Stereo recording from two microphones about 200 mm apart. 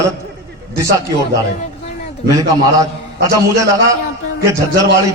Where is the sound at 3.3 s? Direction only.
15° right (ahead or behind).